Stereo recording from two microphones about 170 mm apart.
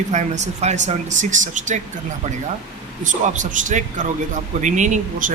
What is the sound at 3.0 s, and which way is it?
Speech, 50° right (ahead or behind).